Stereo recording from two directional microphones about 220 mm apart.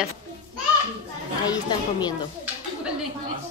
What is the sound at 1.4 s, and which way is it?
Speech, 15° left (ahead or behind).